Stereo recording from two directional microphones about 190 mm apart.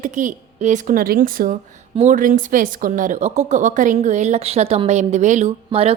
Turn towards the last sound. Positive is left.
turn(degrees=-30)  # may be behind; listen again after turning